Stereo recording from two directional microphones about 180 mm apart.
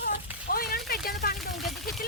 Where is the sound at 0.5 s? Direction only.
55° left (ahead or behind).